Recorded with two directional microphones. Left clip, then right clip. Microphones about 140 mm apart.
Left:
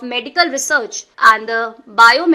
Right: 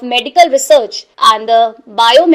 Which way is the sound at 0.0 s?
15° right (ahead or behind).